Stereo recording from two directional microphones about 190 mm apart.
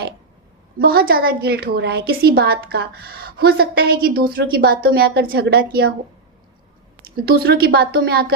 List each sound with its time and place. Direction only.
0.8 s a woman's voice: 50° right (ahead or behind)
7.2 s speech: 55° right (ahead or behind)